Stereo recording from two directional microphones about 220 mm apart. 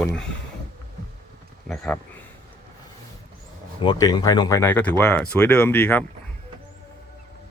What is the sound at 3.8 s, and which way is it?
Speech, 20° left (ahead or behind).